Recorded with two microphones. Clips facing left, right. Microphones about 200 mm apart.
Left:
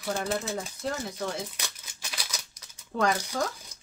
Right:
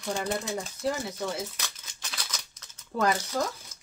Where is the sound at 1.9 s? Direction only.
10° left (ahead or behind).